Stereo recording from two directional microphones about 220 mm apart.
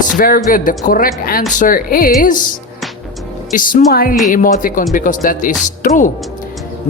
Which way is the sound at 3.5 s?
40° left (ahead or behind).